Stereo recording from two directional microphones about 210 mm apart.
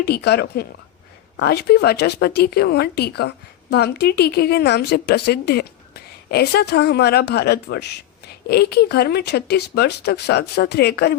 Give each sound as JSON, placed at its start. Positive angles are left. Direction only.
{"t": 0.0, "sound": "speech", "side_deg": 50}